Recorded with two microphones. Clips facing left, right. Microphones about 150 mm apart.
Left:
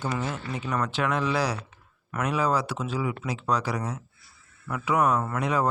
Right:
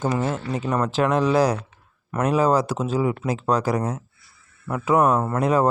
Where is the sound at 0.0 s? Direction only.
45° right (ahead or behind).